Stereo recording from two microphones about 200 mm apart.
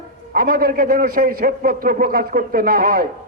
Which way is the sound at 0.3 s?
45° right (ahead or behind).